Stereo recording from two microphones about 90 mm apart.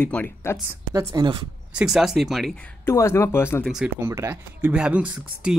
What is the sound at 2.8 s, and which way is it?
Speech, 30° left (ahead or behind).